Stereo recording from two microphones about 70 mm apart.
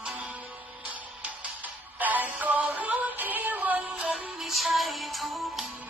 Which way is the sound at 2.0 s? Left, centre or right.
Right.